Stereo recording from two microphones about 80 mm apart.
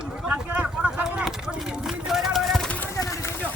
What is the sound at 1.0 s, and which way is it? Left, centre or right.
Clip-clop, centre.